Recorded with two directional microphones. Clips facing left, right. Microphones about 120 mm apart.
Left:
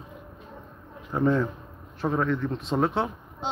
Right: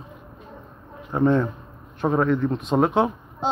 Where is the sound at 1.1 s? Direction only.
30° right (ahead or behind).